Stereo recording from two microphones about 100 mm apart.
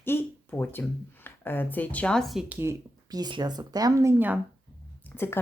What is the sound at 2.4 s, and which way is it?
Speech, 25° right (ahead or behind).